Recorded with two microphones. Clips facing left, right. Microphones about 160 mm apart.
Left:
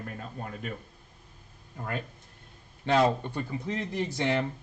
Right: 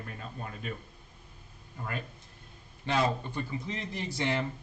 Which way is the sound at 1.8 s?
50° left (ahead or behind).